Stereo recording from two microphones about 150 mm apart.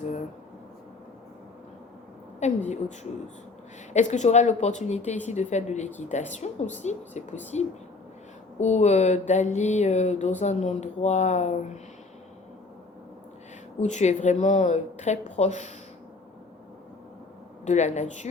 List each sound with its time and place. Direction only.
2.4 s speech: 50° left (ahead or behind)
8.5 s speech: 50° left (ahead or behind)
13.7 s speech: 50° left (ahead or behind)
17.7 s speech: 50° left (ahead or behind)